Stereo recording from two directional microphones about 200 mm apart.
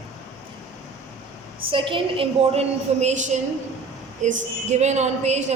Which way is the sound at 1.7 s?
25° right (ahead or behind).